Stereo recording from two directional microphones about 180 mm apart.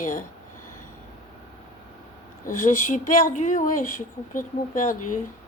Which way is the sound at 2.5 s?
45° left (ahead or behind).